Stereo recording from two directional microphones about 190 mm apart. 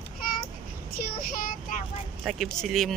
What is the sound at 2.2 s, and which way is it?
Speech, centre (ahead or behind).